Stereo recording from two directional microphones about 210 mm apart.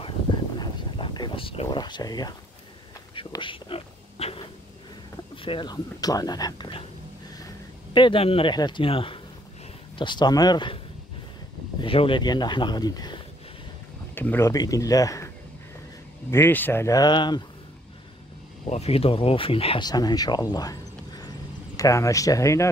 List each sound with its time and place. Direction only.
0.6 s a sound: 20° left (ahead or behind)
3.2 s speech: 20° left (ahead or behind)
7.9 s speech: 25° left (ahead or behind)
11.8 s a man's voice: 25° left (ahead or behind)
18.7 s speech: 30° left (ahead or behind); by 22.7 s 15° left (ahead or behind)